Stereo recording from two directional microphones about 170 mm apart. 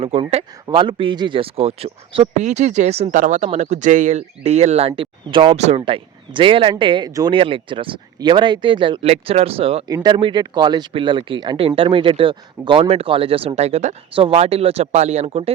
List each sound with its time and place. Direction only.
0.0 s speech: 35° right (ahead or behind)
9.8 s speech: 25° right (ahead or behind)